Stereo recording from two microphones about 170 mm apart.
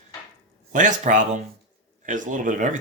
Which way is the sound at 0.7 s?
50° right (ahead or behind).